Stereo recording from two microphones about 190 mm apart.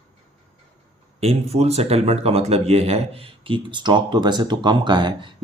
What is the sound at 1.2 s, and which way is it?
Speech, 30° right (ahead or behind).